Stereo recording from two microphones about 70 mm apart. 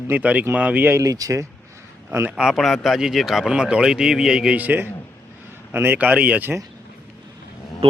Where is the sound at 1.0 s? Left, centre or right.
Right.